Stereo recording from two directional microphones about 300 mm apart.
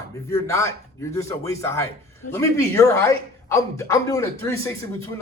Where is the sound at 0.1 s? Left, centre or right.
Centre.